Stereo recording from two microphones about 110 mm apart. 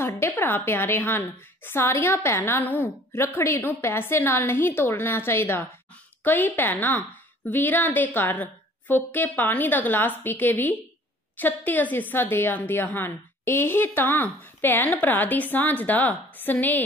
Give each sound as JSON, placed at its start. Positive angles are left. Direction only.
{"t": 0.0, "sound": "a woman's voice", "side_deg": 20}